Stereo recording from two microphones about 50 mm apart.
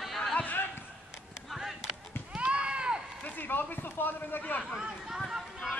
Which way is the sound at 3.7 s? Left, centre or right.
Left.